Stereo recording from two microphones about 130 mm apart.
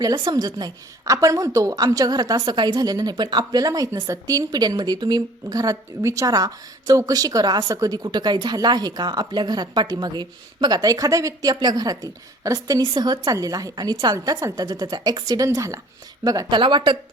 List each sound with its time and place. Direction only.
0.0 s a woman's voice: 30° right (ahead or behind)